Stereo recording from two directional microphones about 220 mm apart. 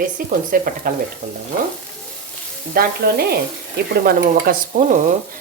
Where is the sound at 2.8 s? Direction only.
40° right (ahead or behind).